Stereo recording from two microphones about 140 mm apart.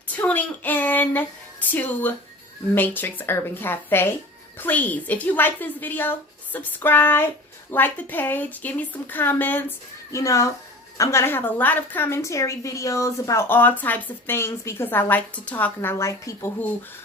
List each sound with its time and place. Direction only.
0.2 s a woman's voice: 10° left (ahead or behind)